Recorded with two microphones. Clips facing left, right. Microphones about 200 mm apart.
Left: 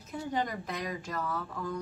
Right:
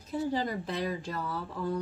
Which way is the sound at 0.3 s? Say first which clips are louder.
Right 2 dB; 30° right (ahead or behind).